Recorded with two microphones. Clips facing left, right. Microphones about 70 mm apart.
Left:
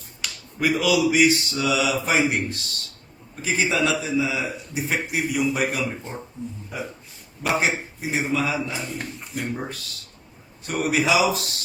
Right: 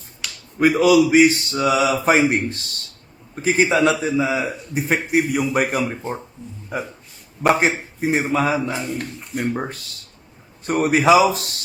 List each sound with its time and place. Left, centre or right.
0.2 s finger snapping: centre
0.6 s speech: right
5.1 s a man's voice: right
7.4 s a man's voice: right
8.7 s speech: centre
9.6 s speech: right